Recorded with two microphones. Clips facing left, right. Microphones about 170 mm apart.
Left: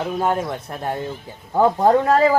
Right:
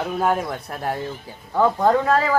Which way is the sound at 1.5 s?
30° left (ahead or behind).